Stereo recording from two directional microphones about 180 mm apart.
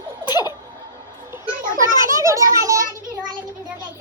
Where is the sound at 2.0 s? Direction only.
15° right (ahead or behind).